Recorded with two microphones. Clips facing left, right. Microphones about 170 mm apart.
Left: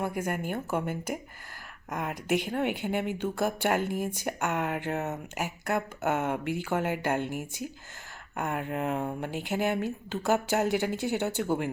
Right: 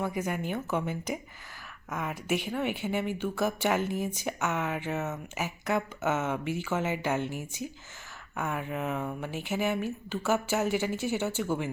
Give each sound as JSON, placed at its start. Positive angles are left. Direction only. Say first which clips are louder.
{"t": 0.0, "sound": "speech", "louder": "even", "side_deg": 10}
{"t": 1.9, "sound": "speech", "louder": "left 2 dB", "side_deg": 15}
{"t": 8.8, "sound": "speech", "louder": "left 2 dB", "side_deg": 15}